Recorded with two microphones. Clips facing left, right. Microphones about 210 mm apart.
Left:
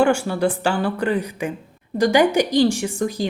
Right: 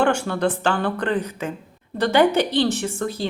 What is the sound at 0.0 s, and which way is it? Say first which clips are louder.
A woman's voice: left 2 dB; 10° left (ahead or behind).